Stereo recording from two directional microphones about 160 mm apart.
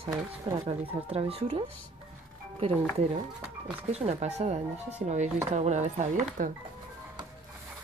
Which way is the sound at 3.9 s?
45° right (ahead or behind).